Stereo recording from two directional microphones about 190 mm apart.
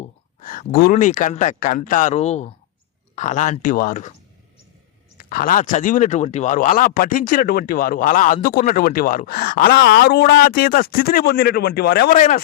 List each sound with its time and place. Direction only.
0.0 s speech: 40° left (ahead or behind)
5.1 s speech: 50° left (ahead or behind)
12.1 s speech: 40° left (ahead or behind)